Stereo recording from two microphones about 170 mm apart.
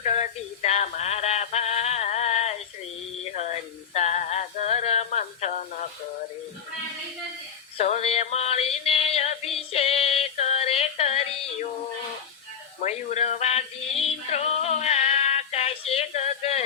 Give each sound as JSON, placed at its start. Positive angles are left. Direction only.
{"t": 0.0, "sound": "synthetic singing", "side_deg": 45}
{"t": 3.9, "sound": "male singing", "side_deg": 40}
{"t": 7.8, "sound": "music", "side_deg": 40}
{"t": 12.8, "sound": "music", "side_deg": 40}
{"t": 14.3, "sound": "a sound", "side_deg": 40}